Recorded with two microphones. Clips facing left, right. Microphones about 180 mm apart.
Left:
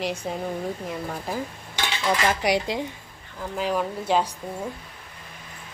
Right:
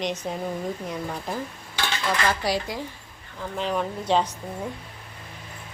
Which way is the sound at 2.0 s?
10° left (ahead or behind).